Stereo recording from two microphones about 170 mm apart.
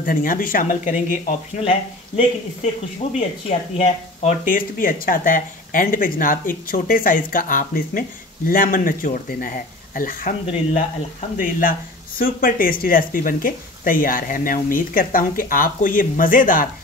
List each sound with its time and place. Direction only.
0.0 s speech: 55° left (ahead or behind)
1.6 s speech: 35° left (ahead or behind)
4.5 s speech: 55° left (ahead or behind)
10.4 s speech: 40° left (ahead or behind)
12.2 s speech: 55° left (ahead or behind)